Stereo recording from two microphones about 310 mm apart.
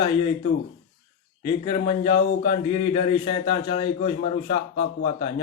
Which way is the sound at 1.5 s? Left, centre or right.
Centre.